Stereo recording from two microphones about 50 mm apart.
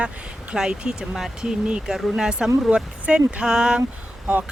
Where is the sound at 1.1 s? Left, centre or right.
Centre.